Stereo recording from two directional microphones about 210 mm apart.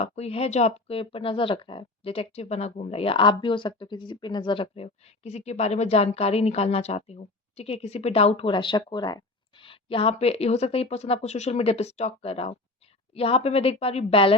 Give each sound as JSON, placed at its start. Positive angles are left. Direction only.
{"t": 0.0, "sound": "speech", "side_deg": 30}